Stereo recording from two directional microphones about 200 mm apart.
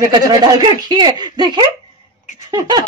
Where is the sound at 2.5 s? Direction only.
20° right (ahead or behind).